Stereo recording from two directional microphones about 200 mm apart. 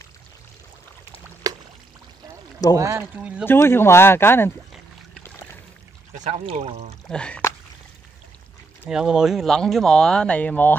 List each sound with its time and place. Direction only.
1.5 s pour: 20° right (ahead or behind)
2.7 s speech: 15° right (ahead or behind)
3.4 s speech: 10° left (ahead or behind)
6.1 s speech: 35° right (ahead or behind)
7.1 s speech: 5° left (ahead or behind)
8.8 s speech: 5° right (ahead or behind)